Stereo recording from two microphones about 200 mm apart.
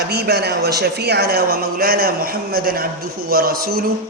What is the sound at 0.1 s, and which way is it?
A man's voice, 55° right (ahead or behind).